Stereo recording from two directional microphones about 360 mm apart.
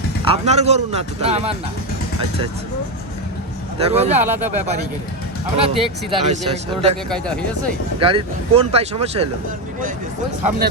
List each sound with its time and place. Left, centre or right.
0.3 s speech: centre
3.8 s speech: centre
4.2 s speech: centre
5.6 s speech: centre
7.1 s speech: centre
7.9 s speech: centre